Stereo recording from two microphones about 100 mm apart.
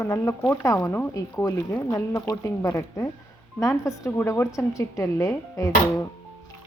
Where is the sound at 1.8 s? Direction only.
35° left (ahead or behind).